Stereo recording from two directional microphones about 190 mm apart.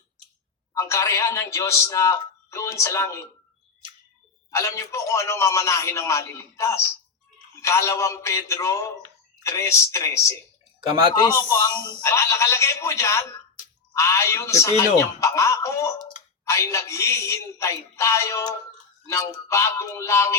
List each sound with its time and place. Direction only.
0.7 s a man's voice: 15° left (ahead or behind)
4.5 s a man's voice: 15° left (ahead or behind)